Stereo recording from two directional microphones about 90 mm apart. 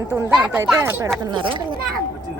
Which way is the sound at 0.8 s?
25° right (ahead or behind).